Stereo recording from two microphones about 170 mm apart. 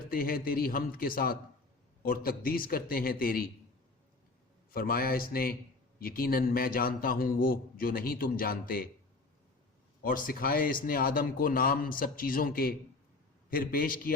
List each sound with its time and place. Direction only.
0.1 s a man's voice: 60° left (ahead or behind)
4.7 s a man's voice: 60° left (ahead or behind)
10.0 s a man's voice: 55° left (ahead or behind)